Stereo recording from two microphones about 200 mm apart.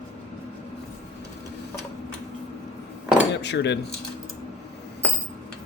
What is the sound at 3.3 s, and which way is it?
Speech, 60° left (ahead or behind).